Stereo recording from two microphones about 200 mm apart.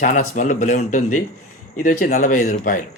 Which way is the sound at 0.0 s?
40° left (ahead or behind).